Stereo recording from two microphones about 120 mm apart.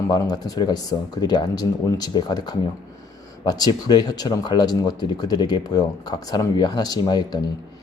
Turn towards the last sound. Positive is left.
turn(degrees=35)  # may be behind; listen again after turning